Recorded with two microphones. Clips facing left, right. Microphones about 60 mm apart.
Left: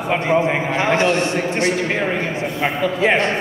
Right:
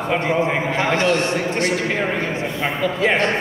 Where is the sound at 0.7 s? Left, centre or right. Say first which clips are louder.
Left 2 dB; left.